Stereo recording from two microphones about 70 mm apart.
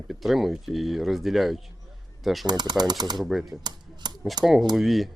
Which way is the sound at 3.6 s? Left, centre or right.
Right.